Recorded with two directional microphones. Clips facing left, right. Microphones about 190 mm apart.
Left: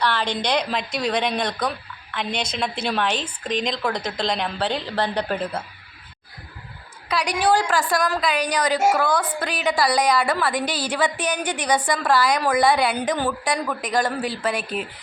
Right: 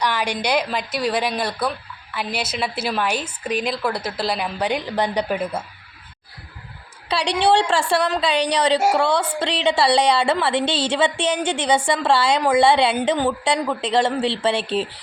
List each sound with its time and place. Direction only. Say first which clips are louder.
0.0 s a woman's voice: right 1 dB; 10° right (ahead or behind)
7.1 s a woman's voice: right 2 dB; 30° right (ahead or behind)